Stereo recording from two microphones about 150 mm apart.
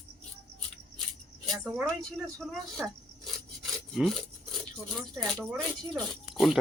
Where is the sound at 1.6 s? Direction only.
5° left (ahead or behind).